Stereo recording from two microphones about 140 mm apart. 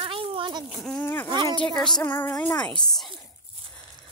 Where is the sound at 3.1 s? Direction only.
40° right (ahead or behind).